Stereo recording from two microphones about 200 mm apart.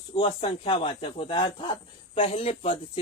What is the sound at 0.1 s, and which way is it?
Speech, 25° left (ahead or behind).